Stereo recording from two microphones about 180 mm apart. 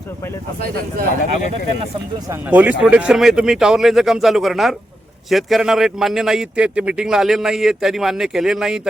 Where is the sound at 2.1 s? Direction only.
20° right (ahead or behind).